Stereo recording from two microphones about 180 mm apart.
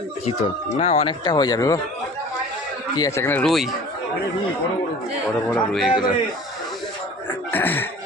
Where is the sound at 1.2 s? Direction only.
20° left (ahead or behind).